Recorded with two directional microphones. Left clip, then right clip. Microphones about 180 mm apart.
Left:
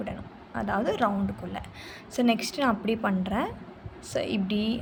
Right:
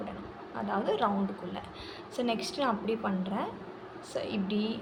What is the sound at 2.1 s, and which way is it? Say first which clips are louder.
A woman's voice: left 6 dB; 50° left (ahead or behind).